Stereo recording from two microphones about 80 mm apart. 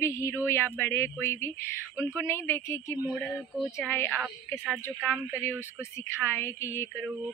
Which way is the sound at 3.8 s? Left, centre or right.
Left.